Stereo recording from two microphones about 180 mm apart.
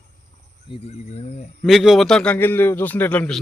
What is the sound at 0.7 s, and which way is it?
Speech, 35° left (ahead or behind).